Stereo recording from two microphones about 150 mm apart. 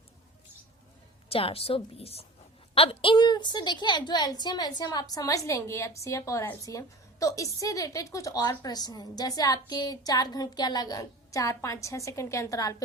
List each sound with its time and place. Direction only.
1.3 s a woman's voice: 40° left (ahead or behind); by 12.7 s 20° left (ahead or behind)